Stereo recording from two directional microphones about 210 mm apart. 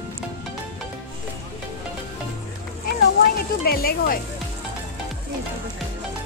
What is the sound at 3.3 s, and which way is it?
Speech, 45° left (ahead or behind).